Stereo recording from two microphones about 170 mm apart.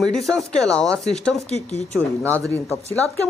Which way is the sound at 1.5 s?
40° left (ahead or behind).